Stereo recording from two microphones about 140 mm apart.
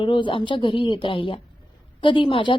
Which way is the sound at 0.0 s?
35° left (ahead or behind).